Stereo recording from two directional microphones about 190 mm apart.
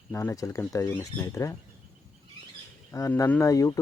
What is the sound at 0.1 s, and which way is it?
Speech, 15° left (ahead or behind).